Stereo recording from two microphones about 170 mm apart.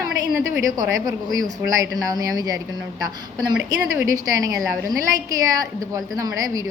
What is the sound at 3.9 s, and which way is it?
A woman's voice, 20° right (ahead or behind).